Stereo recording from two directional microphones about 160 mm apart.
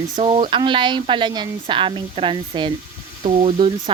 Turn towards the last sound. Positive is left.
turn(degrees=-35)  # may be behind; listen again after turning